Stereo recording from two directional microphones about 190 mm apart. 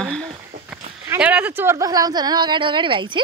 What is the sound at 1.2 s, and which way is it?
Speech, 5° right (ahead or behind).